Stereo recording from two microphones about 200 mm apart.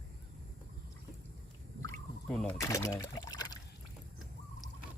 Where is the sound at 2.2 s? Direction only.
5° left (ahead or behind).